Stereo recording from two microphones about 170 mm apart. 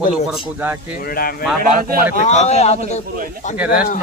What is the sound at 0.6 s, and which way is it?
Speech, 10° right (ahead or behind).